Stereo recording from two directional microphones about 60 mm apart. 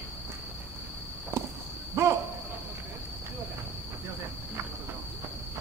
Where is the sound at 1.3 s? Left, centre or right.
Right.